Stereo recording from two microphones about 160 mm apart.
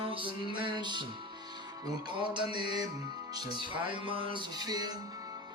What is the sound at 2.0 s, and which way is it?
Music, 30° right (ahead or behind).